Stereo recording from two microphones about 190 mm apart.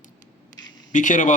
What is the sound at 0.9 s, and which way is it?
Speech, 40° left (ahead or behind).